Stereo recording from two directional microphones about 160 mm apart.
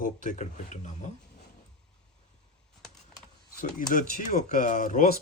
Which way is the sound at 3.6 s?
60° left (ahead or behind).